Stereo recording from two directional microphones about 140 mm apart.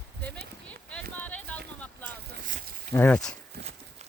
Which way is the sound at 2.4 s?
75° right (ahead or behind).